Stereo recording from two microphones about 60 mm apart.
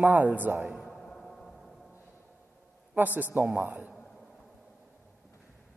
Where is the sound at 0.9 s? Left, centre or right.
Centre.